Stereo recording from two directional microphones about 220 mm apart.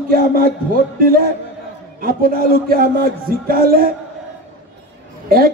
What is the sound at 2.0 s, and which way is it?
A man's voice, 40° right (ahead or behind).